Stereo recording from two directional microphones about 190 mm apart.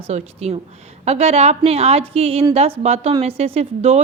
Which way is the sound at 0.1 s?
35° right (ahead or behind).